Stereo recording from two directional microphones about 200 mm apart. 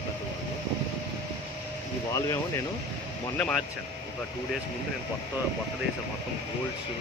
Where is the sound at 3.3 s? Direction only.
5° left (ahead or behind).